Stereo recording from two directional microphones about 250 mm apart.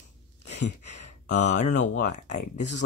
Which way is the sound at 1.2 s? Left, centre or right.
Left.